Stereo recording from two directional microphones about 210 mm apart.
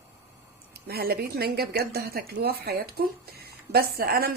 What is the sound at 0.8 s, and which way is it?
Speech, 45° right (ahead or behind).